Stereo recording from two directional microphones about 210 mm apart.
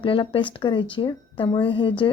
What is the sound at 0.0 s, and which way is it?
Speech, 25° left (ahead or behind).